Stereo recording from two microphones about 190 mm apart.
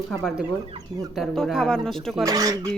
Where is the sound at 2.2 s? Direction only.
20° right (ahead or behind).